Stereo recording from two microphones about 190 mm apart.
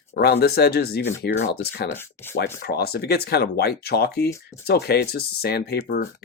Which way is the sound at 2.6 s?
55° left (ahead or behind).